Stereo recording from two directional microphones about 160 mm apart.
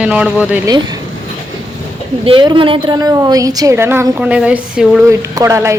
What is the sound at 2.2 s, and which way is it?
A woman's voice, 30° right (ahead or behind).